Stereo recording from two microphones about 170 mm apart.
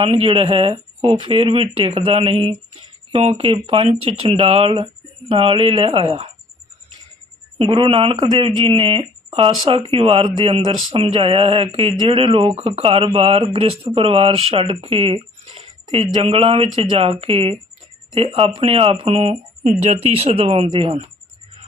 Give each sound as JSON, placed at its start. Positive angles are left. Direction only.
{"t": 0.0, "sound": "speech", "side_deg": -35}
{"t": 7.6, "sound": "speech", "side_deg": -30}